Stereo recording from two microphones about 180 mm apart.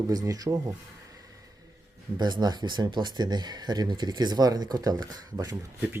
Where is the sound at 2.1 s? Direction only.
25° right (ahead or behind).